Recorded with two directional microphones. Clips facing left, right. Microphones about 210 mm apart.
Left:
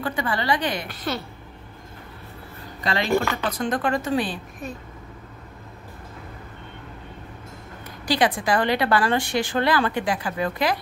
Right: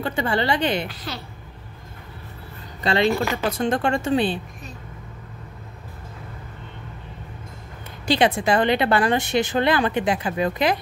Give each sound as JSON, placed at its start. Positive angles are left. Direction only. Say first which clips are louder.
{"t": 0.0, "sound": "speech", "louder": "right 3 dB", "side_deg": -25}
{"t": 0.8, "sound": "speech", "louder": "left 4 dB", "side_deg": 50}
{"t": 2.8, "sound": "speech", "louder": "right 2 dB", "side_deg": -25}
{"t": 8.0, "sound": "speech", "louder": "right 2 dB", "side_deg": -25}